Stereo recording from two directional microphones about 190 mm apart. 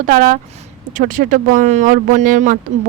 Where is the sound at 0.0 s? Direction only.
50° right (ahead or behind).